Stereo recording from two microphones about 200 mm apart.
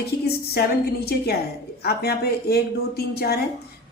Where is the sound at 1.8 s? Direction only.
50° left (ahead or behind).